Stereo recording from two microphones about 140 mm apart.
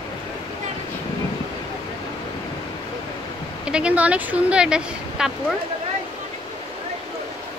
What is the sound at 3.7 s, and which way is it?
Speech, 10° right (ahead or behind).